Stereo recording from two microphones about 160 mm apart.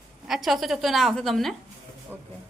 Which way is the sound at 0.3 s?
Centre (ahead or behind).